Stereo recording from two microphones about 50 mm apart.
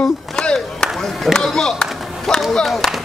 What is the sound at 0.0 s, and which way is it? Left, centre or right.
Chop, centre.